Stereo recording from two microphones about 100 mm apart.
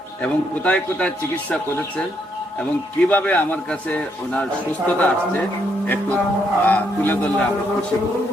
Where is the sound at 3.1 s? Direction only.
15° left (ahead or behind).